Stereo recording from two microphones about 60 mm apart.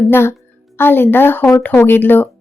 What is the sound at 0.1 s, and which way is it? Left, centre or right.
A child's voice, left.